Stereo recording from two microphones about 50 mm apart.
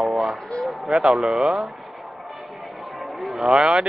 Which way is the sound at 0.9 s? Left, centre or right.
Centre.